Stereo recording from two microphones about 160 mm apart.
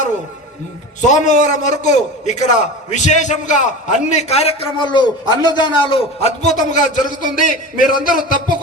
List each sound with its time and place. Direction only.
1.0 s a man's voice: 50° left (ahead or behind)